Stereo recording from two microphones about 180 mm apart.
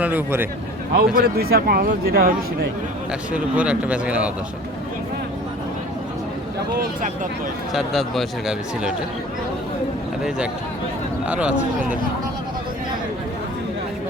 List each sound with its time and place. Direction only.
0.0 s speech: 10° right (ahead or behind)
0.9 s speech: 60° right (ahead or behind)
3.3 s speech: 5° right (ahead or behind)
7.7 s speech: centre (ahead or behind)
10.2 s speech: 5° right (ahead or behind)